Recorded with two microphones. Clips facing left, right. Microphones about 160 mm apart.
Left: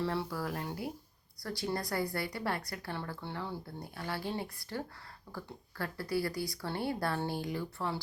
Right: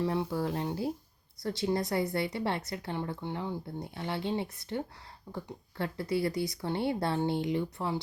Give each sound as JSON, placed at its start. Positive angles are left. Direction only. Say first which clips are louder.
{"t": 0.0, "sound": "speech", "louder": "right 4 dB", "side_deg": -15}